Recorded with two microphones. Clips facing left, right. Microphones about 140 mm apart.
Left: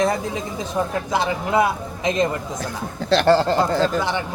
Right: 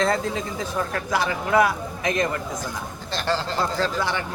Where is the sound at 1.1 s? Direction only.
20° left (ahead or behind).